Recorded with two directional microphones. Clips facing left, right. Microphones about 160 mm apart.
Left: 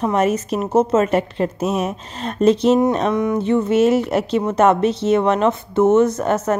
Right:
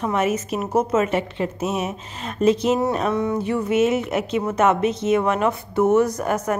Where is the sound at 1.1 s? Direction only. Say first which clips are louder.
Left 4 dB; 40° left (ahead or behind).